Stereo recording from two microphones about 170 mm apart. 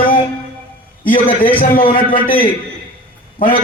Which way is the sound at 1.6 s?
60° left (ahead or behind).